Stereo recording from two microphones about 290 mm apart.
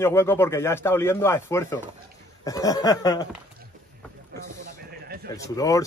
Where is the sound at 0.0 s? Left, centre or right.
Centre.